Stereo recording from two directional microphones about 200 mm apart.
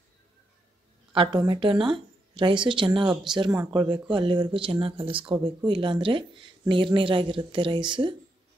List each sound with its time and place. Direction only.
1.1 s speech: 25° right (ahead or behind)
3.1 s speech: 5° right (ahead or behind)
3.3 s speech: 20° right (ahead or behind)